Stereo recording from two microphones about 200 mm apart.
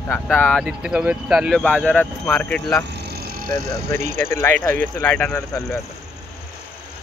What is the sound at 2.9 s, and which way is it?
Vehicle, 55° right (ahead or behind).